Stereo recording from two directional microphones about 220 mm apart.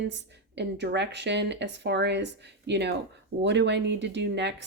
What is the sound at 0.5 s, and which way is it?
Speech, 50° right (ahead or behind).